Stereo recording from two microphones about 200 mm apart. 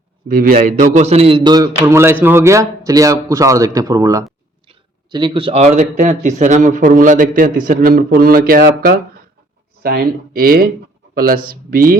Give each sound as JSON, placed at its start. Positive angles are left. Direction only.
{"t": 0.3, "sound": "a man's voice", "side_deg": -45}